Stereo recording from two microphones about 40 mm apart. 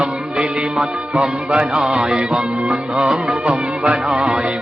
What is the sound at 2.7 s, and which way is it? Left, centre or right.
Music, right.